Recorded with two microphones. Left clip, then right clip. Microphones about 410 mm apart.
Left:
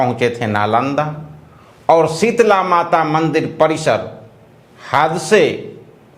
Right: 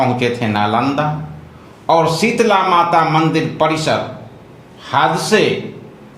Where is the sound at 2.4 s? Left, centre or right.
Left.